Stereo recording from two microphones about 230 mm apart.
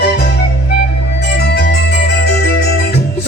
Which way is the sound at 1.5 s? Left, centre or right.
Left.